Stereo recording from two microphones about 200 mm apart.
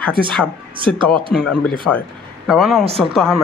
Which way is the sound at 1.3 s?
5° left (ahead or behind).